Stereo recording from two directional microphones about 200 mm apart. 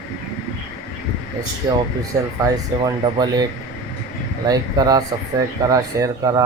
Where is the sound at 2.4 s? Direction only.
20° right (ahead or behind).